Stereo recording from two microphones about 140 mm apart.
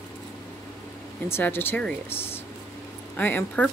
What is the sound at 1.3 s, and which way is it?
Speech, 15° left (ahead or behind).